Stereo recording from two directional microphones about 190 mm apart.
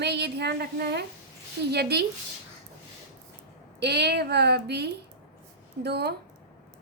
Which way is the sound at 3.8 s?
60° right (ahead or behind).